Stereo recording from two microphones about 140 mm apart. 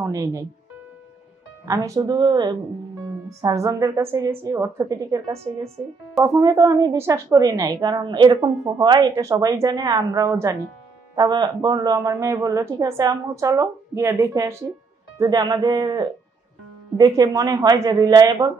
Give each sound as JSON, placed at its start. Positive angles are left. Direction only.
{"t": 0.0, "sound": "speech", "side_deg": -25}
{"t": 1.7, "sound": "speech", "side_deg": -30}
{"t": 5.2, "sound": "a woman's voice", "side_deg": -45}
{"t": 6.2, "sound": "a woman's voice", "side_deg": -25}